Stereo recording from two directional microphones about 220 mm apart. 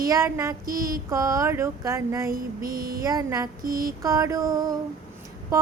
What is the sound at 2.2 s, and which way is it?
Female singing, 40° right (ahead or behind).